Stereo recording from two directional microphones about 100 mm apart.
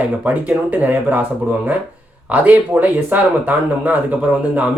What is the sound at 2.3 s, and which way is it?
Speech, 15° right (ahead or behind).